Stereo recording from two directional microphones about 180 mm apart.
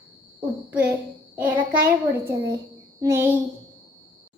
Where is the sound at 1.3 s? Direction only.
10° right (ahead or behind).